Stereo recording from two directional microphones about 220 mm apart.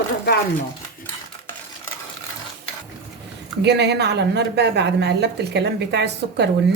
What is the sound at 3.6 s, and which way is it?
A woman's voice, 50° right (ahead or behind).